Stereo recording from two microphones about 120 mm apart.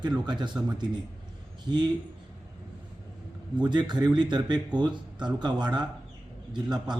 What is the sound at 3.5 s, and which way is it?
Speech, 35° right (ahead or behind).